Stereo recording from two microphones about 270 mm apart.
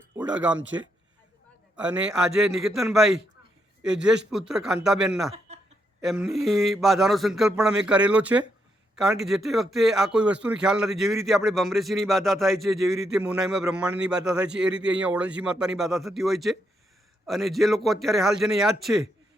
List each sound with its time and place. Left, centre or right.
0.3 s a man's voice: centre
2.4 s a man's voice: centre